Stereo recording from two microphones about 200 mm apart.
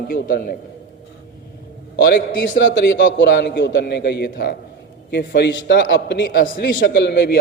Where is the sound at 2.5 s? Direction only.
65° left (ahead or behind).